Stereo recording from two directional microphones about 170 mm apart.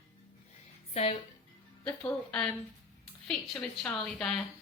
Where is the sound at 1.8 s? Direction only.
10° left (ahead or behind).